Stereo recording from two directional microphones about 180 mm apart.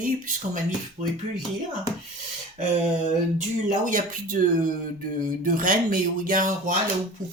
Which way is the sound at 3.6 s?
45° right (ahead or behind).